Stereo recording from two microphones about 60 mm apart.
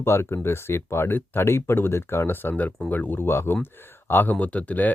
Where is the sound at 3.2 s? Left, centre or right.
Left.